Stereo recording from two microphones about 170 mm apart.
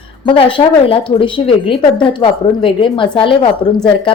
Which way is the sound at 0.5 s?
30° left (ahead or behind).